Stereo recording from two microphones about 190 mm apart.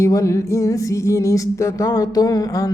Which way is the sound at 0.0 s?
15° left (ahead or behind).